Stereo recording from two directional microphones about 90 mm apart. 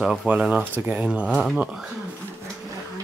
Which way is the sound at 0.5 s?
20° right (ahead or behind).